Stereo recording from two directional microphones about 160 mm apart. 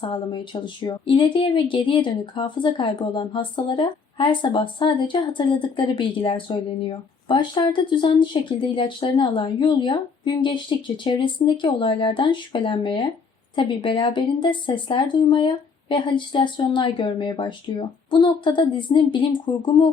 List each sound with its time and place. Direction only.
0.0 s speech: 30° left (ahead or behind)